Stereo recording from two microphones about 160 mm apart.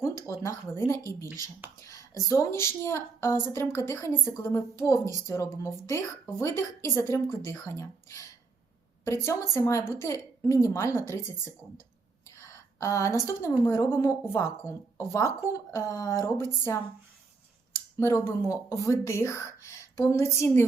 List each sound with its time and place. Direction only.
0.0 s a woman's voice: 20° left (ahead or behind)
12.2 s a sound: 20° left (ahead or behind)
13.7 s a woman's voice: 15° left (ahead or behind)